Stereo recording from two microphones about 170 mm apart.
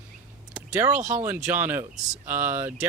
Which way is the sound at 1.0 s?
45° right (ahead or behind).